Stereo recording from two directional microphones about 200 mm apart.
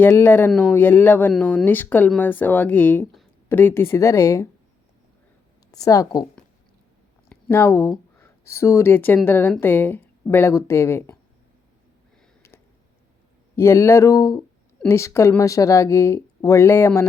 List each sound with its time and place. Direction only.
0.0 s speech: 10° left (ahead or behind)
5.7 s speech: 15° left (ahead or behind)
7.3 s speech: 10° left (ahead or behind)
13.6 s speech: 10° left (ahead or behind)